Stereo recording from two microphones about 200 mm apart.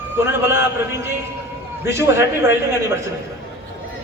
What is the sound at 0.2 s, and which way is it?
A man's voice, 10° right (ahead or behind).